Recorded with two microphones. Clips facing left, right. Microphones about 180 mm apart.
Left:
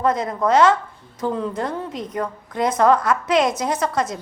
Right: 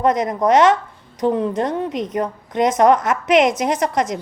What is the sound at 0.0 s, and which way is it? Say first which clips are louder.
A woman's voice: right 3 dB; 20° right (ahead or behind).